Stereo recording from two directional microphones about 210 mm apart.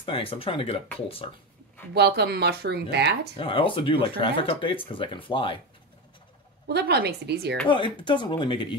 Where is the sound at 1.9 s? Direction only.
50° right (ahead or behind).